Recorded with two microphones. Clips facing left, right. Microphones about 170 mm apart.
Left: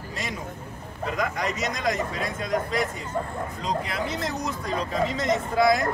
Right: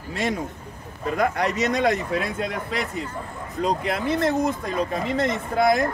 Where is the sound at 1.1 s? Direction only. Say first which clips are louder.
Right 6 dB; 65° right (ahead or behind).